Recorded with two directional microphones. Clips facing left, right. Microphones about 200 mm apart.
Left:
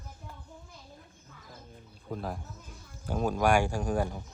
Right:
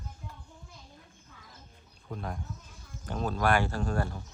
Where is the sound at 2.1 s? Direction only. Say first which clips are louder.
Left 2 dB; centre (ahead or behind).